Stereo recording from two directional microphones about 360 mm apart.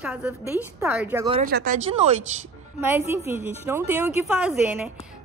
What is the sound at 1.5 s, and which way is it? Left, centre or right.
Speech, right.